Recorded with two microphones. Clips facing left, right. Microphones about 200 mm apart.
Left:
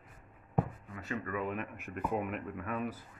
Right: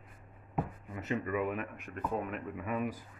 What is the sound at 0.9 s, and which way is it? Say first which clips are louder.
Speech: right 4 dB; 20° right (ahead or behind).